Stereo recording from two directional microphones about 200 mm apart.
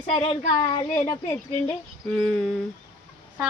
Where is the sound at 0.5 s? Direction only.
15° left (ahead or behind).